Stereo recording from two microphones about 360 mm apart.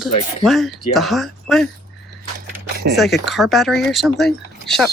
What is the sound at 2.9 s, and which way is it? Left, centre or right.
Speech, centre.